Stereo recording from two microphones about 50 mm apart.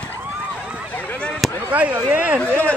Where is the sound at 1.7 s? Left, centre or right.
Right.